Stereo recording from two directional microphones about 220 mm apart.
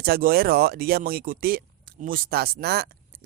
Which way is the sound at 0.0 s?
45° right (ahead or behind).